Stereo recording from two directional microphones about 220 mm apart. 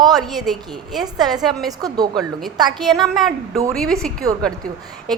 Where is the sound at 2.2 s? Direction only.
Centre (ahead or behind).